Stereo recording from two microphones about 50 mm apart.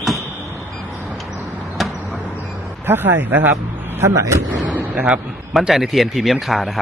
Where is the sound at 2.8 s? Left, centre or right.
Right.